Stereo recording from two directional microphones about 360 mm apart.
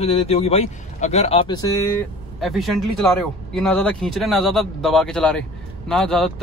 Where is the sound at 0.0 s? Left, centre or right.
Centre.